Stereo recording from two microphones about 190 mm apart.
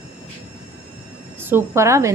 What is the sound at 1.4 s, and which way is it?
Speech, 10° right (ahead or behind).